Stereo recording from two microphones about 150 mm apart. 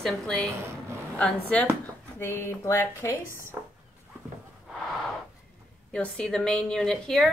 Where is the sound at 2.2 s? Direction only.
15° left (ahead or behind).